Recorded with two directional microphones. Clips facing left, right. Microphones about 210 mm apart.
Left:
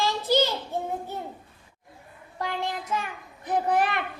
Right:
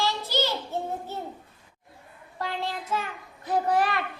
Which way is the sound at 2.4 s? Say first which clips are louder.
Left 1 dB; 15° left (ahead or behind).